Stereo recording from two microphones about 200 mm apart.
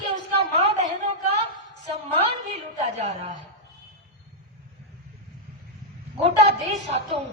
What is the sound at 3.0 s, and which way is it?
Speech, 35° right (ahead or behind).